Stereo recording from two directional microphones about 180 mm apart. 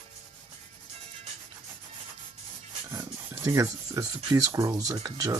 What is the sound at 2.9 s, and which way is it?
Rub, 15° right (ahead or behind).